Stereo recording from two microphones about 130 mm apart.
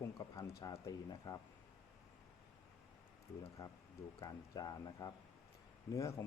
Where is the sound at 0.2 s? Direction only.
25° left (ahead or behind).